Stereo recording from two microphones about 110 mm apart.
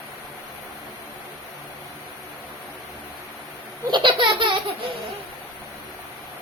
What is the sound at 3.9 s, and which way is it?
Laughter, 45° right (ahead or behind).